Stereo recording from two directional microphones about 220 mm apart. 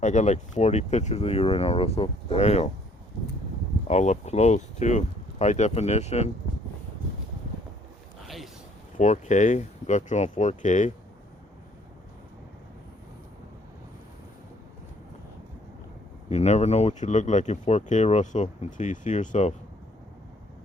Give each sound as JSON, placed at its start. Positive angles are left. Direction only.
{"t": 0.0, "sound": "speech", "side_deg": 30}
{"t": 3.8, "sound": "speech", "side_deg": 30}
{"t": 9.0, "sound": "speech", "side_deg": 30}
{"t": 16.3, "sound": "speech", "side_deg": 30}